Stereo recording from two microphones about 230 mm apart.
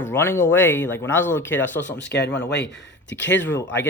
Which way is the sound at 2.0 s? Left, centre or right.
Left.